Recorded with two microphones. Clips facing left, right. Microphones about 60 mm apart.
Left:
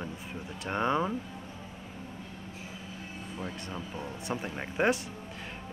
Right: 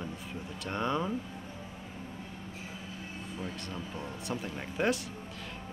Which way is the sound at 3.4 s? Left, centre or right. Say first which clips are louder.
Left 2 dB; left.